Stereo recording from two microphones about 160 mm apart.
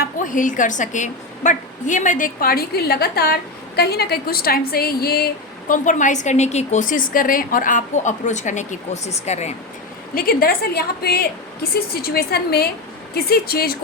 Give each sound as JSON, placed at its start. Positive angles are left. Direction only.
{"t": 0.0, "sound": "a woman's voice", "side_deg": 55}
{"t": 3.8, "sound": "a woman's voice", "side_deg": 90}
{"t": 10.2, "sound": "a woman's voice", "side_deg": 70}